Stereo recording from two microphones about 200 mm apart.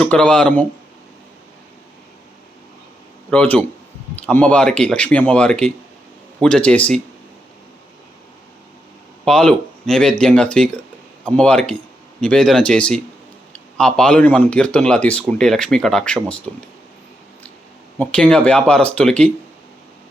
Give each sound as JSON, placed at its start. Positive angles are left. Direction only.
{"t": 0.0, "sound": "speech", "side_deg": 5}
{"t": 3.2, "sound": "speech", "side_deg": 5}
{"t": 9.2, "sound": "speech", "side_deg": 5}
{"t": 18.0, "sound": "speech", "side_deg": 5}